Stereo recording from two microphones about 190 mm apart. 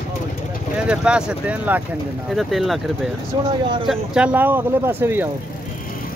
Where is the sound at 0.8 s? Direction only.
5° right (ahead or behind).